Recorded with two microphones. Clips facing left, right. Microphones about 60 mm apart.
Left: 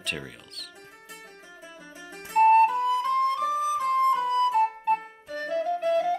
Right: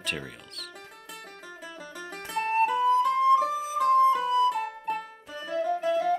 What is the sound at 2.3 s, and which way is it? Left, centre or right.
Music, left.